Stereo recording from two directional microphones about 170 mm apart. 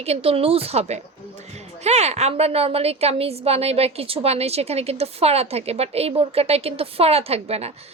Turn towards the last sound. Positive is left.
turn(degrees=-35)  # may be behind; listen again after turning